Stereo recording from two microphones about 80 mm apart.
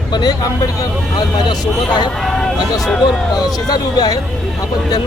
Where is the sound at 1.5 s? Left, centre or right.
Left.